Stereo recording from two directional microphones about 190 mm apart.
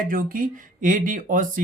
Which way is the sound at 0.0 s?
45° right (ahead or behind).